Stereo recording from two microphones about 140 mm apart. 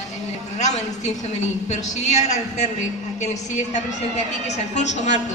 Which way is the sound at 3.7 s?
55° left (ahead or behind).